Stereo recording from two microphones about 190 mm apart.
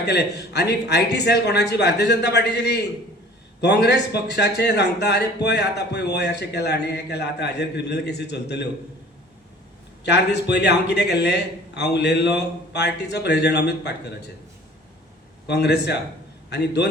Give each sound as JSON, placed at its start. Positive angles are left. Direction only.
{"t": 0.0, "sound": "speech", "side_deg": 60}
{"t": 10.0, "sound": "speech", "side_deg": 65}
{"t": 15.4, "sound": "speech", "side_deg": 60}